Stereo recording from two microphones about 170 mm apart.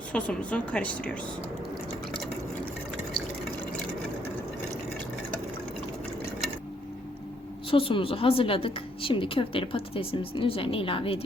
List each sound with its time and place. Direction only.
0.1 s a woman's voice: 5° left (ahead or behind)
7.7 s a woman's voice: 30° left (ahead or behind)